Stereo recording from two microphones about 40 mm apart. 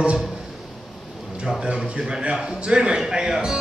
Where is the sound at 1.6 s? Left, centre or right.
Right.